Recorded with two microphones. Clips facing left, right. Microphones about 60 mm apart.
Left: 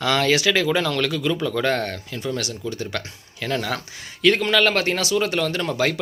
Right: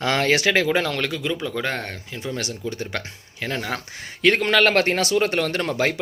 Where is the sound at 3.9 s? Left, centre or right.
Right.